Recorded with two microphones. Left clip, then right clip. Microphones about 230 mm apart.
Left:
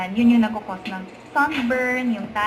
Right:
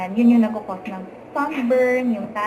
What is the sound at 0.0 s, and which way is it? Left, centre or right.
A woman's voice, left.